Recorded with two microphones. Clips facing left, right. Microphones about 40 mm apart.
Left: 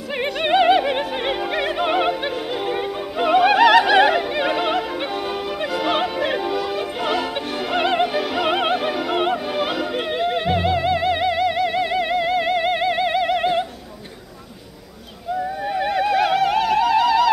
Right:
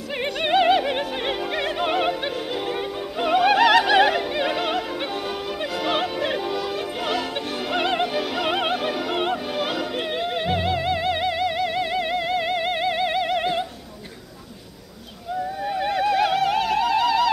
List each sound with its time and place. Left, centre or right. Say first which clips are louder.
0.2 s opera: left 2 dB; centre
15.6 s opera: left 1 dB; centre